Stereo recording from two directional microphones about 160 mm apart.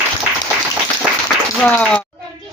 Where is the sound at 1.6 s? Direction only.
5° left (ahead or behind).